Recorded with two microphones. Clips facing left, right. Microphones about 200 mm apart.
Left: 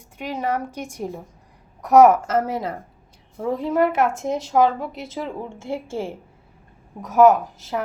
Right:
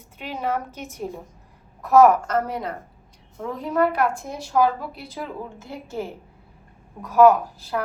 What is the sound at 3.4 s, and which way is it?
Speech, 25° left (ahead or behind).